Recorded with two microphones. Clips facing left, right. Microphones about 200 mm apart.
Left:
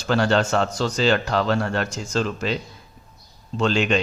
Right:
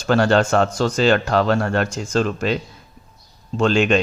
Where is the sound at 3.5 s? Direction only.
50° right (ahead or behind).